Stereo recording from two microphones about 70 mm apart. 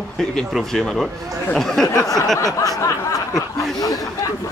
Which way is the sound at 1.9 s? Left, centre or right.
Left.